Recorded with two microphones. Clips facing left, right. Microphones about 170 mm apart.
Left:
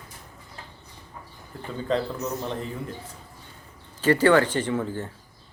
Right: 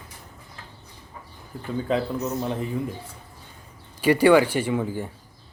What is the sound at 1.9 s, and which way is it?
Speech, 10° right (ahead or behind).